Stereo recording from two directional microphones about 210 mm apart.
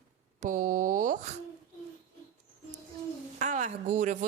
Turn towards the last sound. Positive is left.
turn(degrees=-35)  # may be behind; listen again after turning